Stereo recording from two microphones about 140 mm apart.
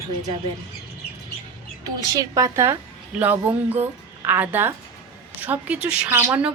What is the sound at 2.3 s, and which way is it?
A woman's voice, 20° right (ahead or behind).